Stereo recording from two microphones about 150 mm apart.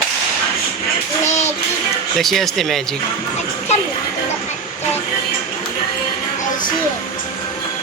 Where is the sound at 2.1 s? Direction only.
Centre (ahead or behind).